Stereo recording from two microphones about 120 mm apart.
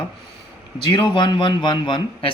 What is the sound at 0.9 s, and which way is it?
A man's voice, 40° left (ahead or behind).